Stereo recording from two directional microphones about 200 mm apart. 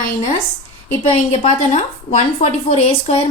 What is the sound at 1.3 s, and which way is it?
Speech, 30° left (ahead or behind).